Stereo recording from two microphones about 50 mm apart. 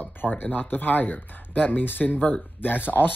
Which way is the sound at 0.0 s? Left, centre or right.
Left.